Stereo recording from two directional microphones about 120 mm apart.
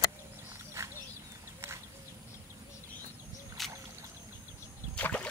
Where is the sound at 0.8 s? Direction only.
20° right (ahead or behind).